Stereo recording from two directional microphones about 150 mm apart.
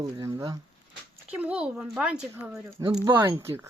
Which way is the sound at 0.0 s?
25° right (ahead or behind).